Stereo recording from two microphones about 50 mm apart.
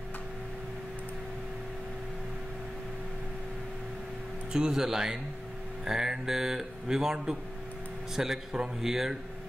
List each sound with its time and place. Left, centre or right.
4.5 s speech: centre